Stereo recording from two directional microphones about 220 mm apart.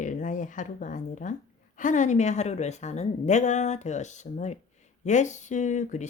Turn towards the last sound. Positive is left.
turn(degrees=35)  # may be behind; listen again after turning